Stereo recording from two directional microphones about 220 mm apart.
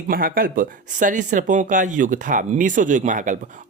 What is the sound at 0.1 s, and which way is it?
Speech, 40° right (ahead or behind).